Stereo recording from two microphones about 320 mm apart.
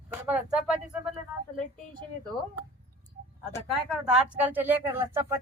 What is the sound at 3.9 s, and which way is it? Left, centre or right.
Speech, centre.